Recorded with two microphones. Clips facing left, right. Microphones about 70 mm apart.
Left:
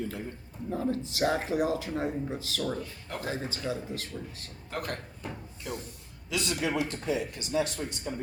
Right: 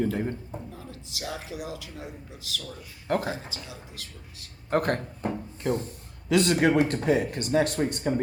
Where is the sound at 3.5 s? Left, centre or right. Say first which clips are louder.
Left 8 dB; left.